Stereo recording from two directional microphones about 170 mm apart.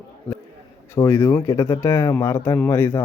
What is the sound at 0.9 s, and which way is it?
Speech, 15° left (ahead or behind).